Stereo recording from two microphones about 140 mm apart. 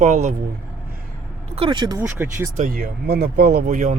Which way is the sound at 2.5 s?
75° right (ahead or behind).